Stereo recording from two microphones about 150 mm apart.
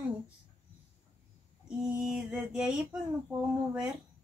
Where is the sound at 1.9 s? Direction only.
5° right (ahead or behind).